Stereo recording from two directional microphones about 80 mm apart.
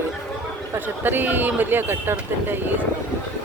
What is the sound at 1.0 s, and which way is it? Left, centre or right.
A man's voice, right.